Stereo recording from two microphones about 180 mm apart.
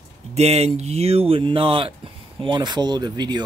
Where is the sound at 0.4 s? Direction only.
35° right (ahead or behind).